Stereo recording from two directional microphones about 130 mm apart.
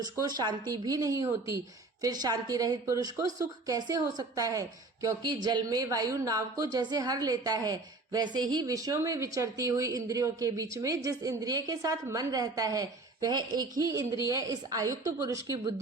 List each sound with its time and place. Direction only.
0.2 s speech: 35° right (ahead or behind)